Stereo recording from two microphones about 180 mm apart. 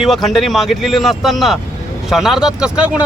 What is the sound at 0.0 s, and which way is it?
Speech, centre (ahead or behind).